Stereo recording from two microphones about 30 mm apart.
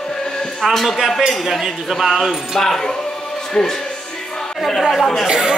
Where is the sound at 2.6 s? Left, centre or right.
Centre.